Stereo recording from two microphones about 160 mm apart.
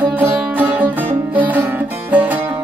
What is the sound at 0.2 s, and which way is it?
Music, 10° right (ahead or behind).